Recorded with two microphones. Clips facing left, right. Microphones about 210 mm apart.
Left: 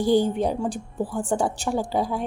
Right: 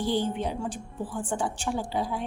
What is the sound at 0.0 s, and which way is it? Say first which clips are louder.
A woman's voice: left 7 dB; 40° left (ahead or behind).